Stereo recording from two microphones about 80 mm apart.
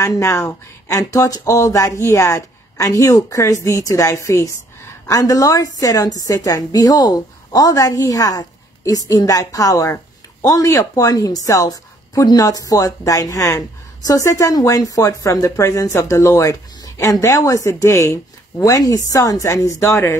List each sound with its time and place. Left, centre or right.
0.0 s a woman's voice: left